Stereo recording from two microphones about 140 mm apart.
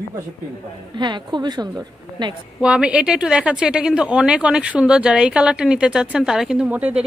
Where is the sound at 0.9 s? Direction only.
30° right (ahead or behind).